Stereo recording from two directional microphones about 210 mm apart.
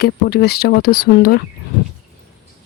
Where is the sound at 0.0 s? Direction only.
50° left (ahead or behind).